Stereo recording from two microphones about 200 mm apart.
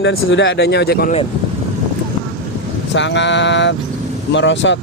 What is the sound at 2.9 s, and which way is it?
Speech, 65° left (ahead or behind).